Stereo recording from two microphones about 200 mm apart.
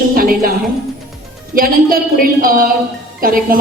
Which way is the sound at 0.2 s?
45° right (ahead or behind).